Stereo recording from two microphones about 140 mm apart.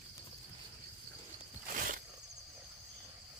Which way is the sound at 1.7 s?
80° right.